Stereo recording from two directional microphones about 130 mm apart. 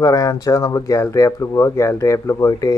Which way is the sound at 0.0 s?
30° left (ahead or behind).